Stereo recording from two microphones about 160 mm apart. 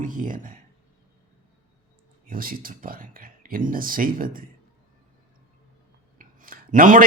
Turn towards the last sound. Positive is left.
turn(degrees=-55)  # may be behind; listen again after turning